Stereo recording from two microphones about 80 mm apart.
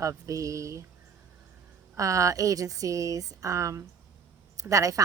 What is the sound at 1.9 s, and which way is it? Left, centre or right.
Speech, right.